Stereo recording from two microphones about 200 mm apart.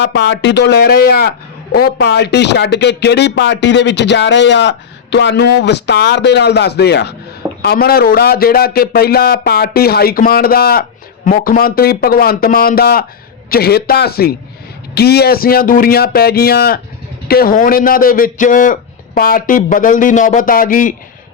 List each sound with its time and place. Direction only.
0.0 s a man's voice: 60° left (ahead or behind); by 20.9 s 40° left (ahead or behind)